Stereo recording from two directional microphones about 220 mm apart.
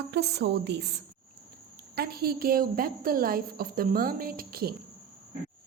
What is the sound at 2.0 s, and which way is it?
A woman's voice, 45° right (ahead or behind).